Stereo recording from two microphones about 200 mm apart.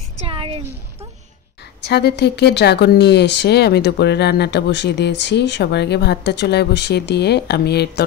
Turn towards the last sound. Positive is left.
turn(degrees=55)  # may be behind; listen again after turning